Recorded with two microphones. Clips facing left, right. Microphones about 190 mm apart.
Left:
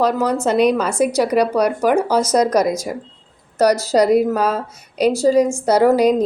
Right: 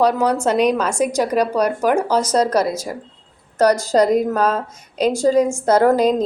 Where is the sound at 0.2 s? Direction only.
10° right (ahead or behind).